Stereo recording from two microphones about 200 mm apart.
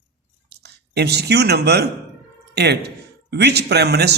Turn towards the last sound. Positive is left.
turn(degrees=-55)  # may be behind; listen again after turning